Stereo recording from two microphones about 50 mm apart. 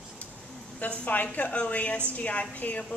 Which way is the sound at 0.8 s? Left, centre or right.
Left.